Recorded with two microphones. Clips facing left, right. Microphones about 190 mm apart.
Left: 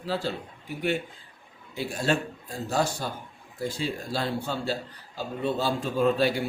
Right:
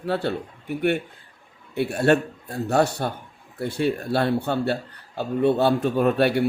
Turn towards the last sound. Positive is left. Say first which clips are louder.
# right 4 dB
turn(degrees=-60)  # may be behind; listen again after turning